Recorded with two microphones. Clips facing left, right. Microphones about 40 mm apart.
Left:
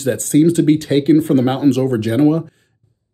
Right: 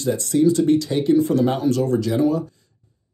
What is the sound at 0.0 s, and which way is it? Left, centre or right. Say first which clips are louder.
Speech: left 4 dB; left.